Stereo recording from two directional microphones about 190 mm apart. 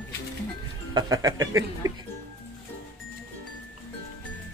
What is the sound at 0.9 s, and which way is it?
Speech, 20° right (ahead or behind).